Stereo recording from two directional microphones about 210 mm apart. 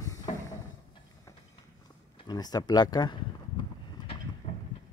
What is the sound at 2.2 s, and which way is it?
Speech, 20° left (ahead or behind).